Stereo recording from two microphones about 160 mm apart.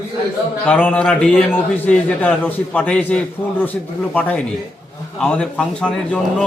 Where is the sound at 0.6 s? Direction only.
10° left (ahead or behind).